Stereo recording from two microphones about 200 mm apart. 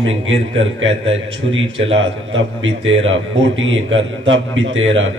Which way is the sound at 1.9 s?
70° right (ahead or behind).